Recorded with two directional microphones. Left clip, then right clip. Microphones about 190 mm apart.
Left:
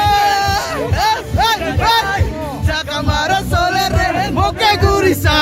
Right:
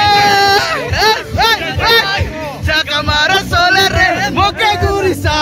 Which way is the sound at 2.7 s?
5° left (ahead or behind).